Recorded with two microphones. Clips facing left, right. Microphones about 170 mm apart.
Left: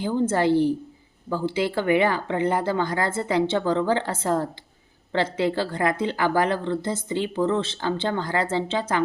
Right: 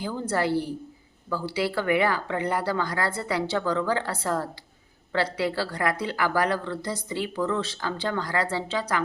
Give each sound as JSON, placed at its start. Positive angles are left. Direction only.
{"t": 0.0, "sound": "speech", "side_deg": 25}